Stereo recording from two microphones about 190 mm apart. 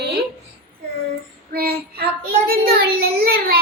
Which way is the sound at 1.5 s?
55° right (ahead or behind).